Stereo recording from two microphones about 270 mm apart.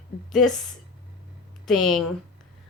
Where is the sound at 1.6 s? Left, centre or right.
Centre.